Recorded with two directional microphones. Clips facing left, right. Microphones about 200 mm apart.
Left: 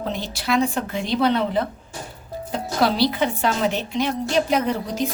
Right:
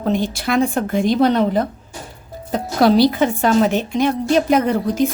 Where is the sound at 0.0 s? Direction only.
50° right (ahead or behind).